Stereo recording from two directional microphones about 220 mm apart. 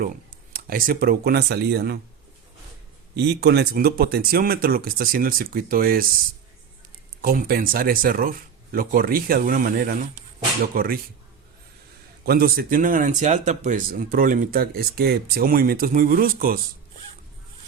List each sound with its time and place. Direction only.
0.5 s speech: 40° right (ahead or behind)
3.2 s speech: 50° right (ahead or behind)
7.2 s speech: 40° right (ahead or behind)
12.2 s speech: 45° right (ahead or behind)